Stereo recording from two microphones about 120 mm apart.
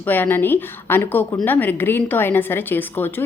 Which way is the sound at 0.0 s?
15° left (ahead or behind).